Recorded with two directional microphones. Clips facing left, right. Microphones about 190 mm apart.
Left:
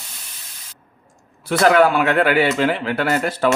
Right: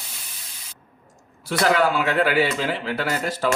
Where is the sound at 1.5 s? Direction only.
60° left (ahead or behind).